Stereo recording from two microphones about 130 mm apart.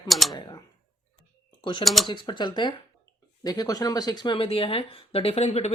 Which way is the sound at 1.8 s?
Centre (ahead or behind).